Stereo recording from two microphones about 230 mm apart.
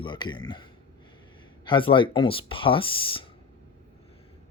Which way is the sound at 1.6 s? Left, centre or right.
Left.